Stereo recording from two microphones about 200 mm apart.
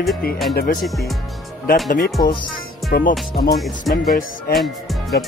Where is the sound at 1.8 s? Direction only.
45° left (ahead or behind).